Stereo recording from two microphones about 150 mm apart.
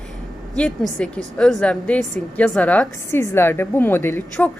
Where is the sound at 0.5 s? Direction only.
5° left (ahead or behind).